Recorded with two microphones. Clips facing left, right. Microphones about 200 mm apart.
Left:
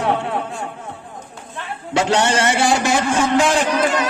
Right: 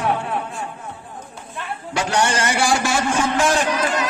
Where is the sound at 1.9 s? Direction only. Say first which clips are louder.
Left 4 dB; 25° left (ahead or behind).